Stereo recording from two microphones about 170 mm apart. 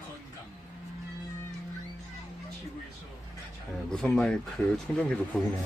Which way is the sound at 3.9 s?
5° left (ahead or behind).